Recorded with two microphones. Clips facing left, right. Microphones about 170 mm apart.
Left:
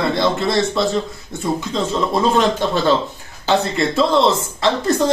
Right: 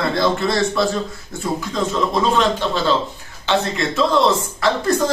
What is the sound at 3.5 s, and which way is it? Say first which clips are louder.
Speech: left 2 dB; 30° left (ahead or behind).